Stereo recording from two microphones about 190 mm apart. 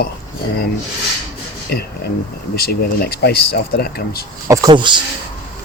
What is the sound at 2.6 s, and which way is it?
Speech, 55° left (ahead or behind).